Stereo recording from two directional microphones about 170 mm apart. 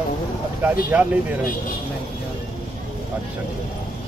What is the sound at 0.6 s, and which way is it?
Speech, 10° right (ahead or behind).